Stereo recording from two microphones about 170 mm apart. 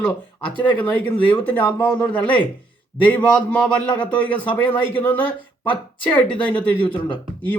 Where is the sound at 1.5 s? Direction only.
10° left (ahead or behind).